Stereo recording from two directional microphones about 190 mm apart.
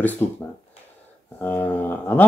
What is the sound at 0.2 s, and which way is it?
Speech, 10° left (ahead or behind).